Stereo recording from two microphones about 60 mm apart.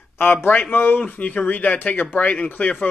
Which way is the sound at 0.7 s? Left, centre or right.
Left.